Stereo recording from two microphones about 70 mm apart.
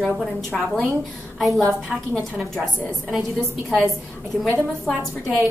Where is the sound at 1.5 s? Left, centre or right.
Right.